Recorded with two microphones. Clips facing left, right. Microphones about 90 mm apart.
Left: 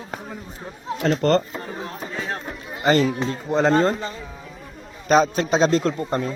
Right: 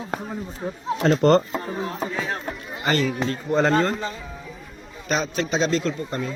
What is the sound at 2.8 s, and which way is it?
Speech, 30° left (ahead or behind).